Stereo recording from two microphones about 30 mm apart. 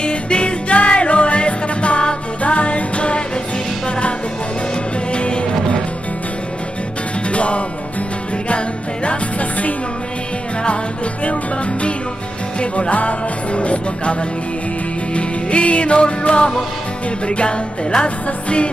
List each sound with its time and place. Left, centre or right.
0.0 s music: left
5.1 s music: left
7.2 s music: left
12.9 s music: left
15.1 s music: left